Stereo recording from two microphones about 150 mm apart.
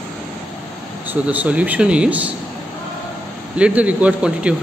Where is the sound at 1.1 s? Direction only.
10° right (ahead or behind).